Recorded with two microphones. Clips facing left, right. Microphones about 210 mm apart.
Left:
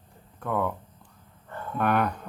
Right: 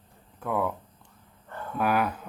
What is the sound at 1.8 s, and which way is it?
Speech, 5° right (ahead or behind).